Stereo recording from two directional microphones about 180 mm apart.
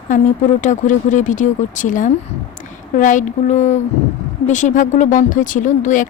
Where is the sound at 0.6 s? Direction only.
45° left (ahead or behind).